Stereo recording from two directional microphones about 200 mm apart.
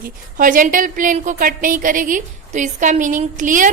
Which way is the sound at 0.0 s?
45° right (ahead or behind).